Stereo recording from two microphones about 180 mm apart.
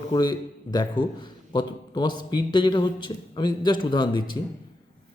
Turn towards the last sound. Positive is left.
turn(degrees=25)  # may be behind; listen again after turning